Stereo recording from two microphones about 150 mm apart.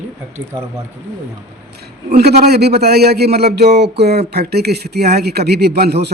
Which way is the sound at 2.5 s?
90° right.